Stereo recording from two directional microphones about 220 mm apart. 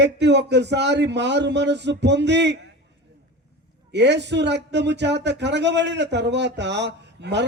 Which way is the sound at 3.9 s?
50° right (ahead or behind).